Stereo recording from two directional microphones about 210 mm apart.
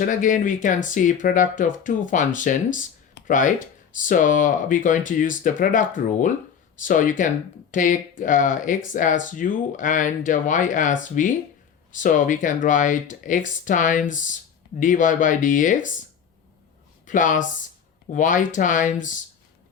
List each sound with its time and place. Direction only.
0.0 s speech: 40° left (ahead or behind)
6.8 s speech: 40° left (ahead or behind)
17.1 s speech: 35° left (ahead or behind)